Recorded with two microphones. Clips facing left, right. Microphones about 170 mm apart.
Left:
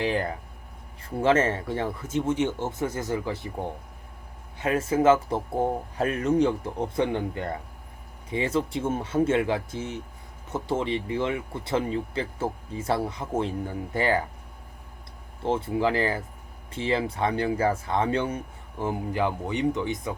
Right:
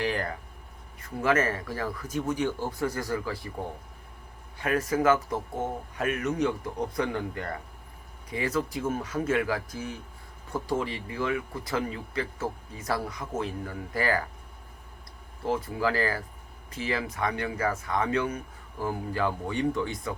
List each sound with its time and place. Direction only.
0.0 s speech: 20° left (ahead or behind)
4.5 s speech: 25° left (ahead or behind)
15.4 s speech: 25° left (ahead or behind)